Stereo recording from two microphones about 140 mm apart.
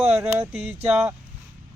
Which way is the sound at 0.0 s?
15° right (ahead or behind).